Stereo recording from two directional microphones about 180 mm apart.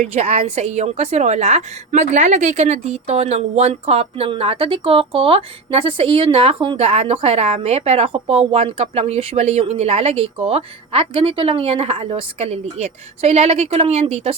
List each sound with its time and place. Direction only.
0.0 s a woman's voice: 35° right (ahead or behind)